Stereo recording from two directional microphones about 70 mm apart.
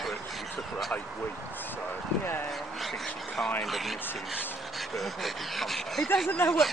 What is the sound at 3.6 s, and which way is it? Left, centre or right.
Speech, centre.